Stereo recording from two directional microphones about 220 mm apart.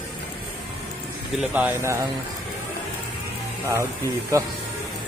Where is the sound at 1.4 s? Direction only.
5° right (ahead or behind).